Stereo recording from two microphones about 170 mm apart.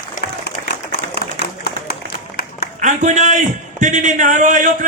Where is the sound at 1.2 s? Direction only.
70° left (ahead or behind).